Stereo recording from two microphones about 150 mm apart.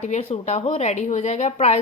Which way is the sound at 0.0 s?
50° left (ahead or behind).